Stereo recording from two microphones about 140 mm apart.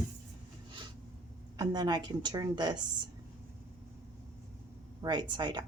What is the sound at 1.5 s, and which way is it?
A woman's voice, 30° right (ahead or behind).